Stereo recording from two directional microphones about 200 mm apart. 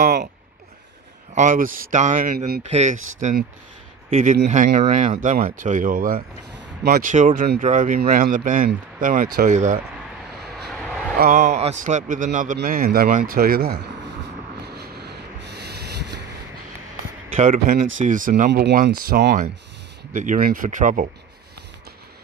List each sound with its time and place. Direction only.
0.0 s speech: 45° right (ahead or behind)
1.3 s speech: 40° right (ahead or behind)
2.7 s speech: 35° right (ahead or behind)
10.6 s vehicle: 5° left (ahead or behind)
11.1 s speech: 40° right (ahead or behind)
14.8 s a sound: 55° right (ahead or behind)
17.4 s speech: 40° right (ahead or behind)
18.5 s speech: 55° right (ahead or behind)